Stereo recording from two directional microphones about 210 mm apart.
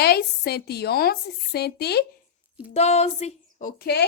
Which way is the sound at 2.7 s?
30° left (ahead or behind).